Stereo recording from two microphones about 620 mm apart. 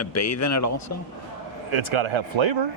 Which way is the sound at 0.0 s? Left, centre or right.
Left.